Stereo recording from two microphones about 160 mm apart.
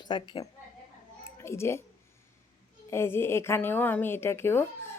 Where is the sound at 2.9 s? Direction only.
15° left (ahead or behind).